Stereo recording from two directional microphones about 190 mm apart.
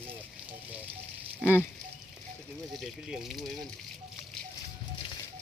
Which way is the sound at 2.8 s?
Centre (ahead or behind).